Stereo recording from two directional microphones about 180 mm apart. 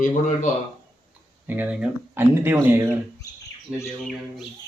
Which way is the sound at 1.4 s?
10° right (ahead or behind).